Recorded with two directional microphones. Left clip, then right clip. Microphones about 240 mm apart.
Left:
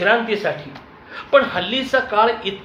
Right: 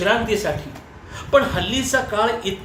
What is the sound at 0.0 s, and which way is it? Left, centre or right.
Speech, centre.